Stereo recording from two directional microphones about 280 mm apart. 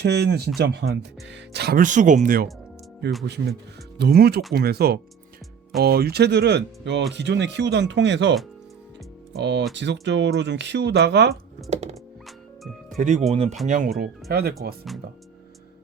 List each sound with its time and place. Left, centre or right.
0.0 s speech: right
9.4 s speech: right
11.7 s speech: right
12.2 s music: centre
13.0 s speech: right